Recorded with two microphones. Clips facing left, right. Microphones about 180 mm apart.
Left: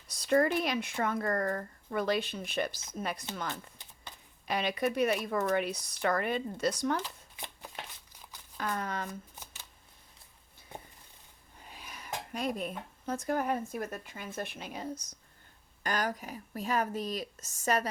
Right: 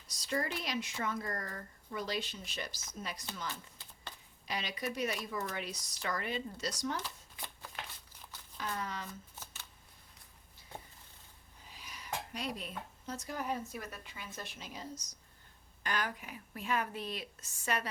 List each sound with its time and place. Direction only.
0.1 s speech: 55° left (ahead or behind)
3.8 s shuffling cards: 20° left (ahead or behind)
4.4 s speech: 55° left (ahead or behind)
7.0 s shuffling cards: 20° left (ahead or behind)
8.5 s speech: 55° left (ahead or behind)
9.3 s shuffling cards: 15° left (ahead or behind)
10.7 s a sound: 20° left (ahead or behind)
11.6 s speech: 55° left (ahead or behind)
15.8 s a woman's voice: 40° left (ahead or behind)